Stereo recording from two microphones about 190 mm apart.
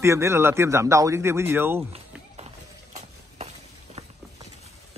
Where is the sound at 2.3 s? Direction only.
35° right (ahead or behind).